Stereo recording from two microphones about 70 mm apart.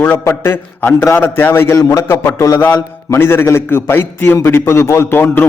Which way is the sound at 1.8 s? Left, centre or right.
Left.